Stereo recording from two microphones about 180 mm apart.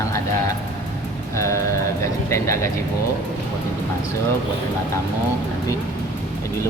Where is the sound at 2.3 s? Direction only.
15° left (ahead or behind).